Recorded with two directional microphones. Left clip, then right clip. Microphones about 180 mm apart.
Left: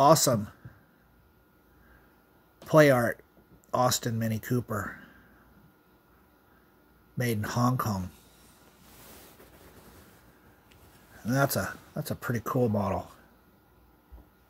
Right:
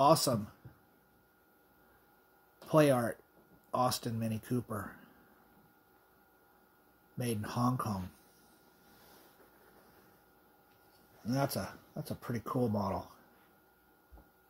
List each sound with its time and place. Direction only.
0.0 s speech: 20° left (ahead or behind)
2.7 s speech: 20° left (ahead or behind)
7.2 s speech: 20° left (ahead or behind)
11.2 s speech: 20° left (ahead or behind)